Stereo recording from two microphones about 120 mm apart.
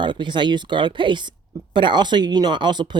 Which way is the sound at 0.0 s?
40° right (ahead or behind).